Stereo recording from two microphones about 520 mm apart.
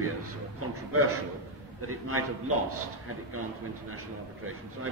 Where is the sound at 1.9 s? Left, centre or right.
Right.